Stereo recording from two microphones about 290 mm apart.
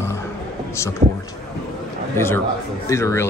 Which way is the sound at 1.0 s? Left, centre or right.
Right.